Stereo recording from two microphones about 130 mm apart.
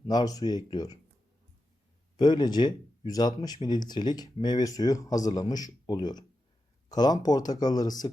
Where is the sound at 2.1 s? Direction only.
35° left (ahead or behind).